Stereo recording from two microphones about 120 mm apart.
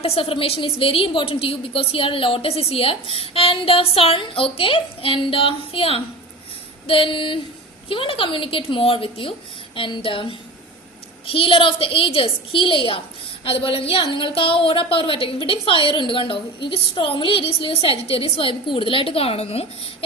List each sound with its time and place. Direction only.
0.0 s a woman's voice: 55° left (ahead or behind)